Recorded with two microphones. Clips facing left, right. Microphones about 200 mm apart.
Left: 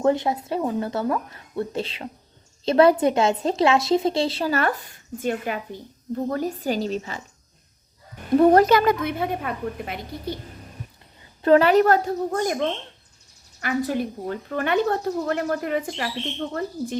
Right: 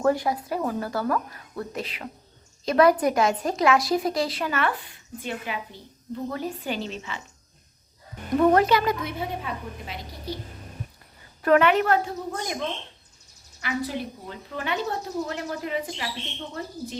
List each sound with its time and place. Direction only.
0.0 s a woman's voice: 25° left (ahead or behind); by 7.2 s 40° left (ahead or behind)
8.4 s a woman's voice: 35° left (ahead or behind); by 10.0 s 60° left (ahead or behind)
11.4 s a woman's voice: 35° left (ahead or behind)
13.6 s speech: 50° left (ahead or behind)